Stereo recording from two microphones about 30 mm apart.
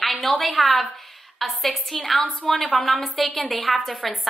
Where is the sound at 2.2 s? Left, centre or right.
Left.